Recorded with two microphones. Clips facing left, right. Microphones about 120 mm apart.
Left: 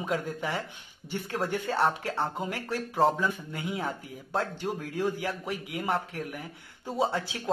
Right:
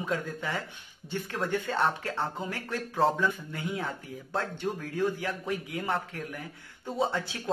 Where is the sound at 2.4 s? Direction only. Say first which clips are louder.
Left 2 dB; 20° left (ahead or behind).